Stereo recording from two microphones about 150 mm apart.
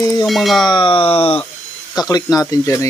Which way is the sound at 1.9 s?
25° left (ahead or behind).